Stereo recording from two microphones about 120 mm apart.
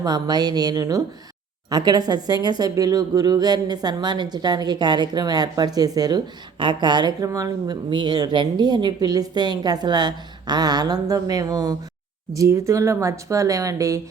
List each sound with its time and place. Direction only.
0.0 s a woman's voice: 35° right (ahead or behind)
7.9 s a woman's voice: 40° right (ahead or behind)